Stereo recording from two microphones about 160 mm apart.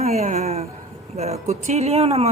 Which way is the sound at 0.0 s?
45° right (ahead or behind).